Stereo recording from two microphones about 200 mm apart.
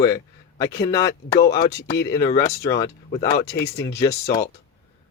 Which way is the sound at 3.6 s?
60° left (ahead or behind).